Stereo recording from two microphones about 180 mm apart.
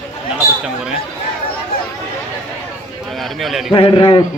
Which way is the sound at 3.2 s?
Centre (ahead or behind).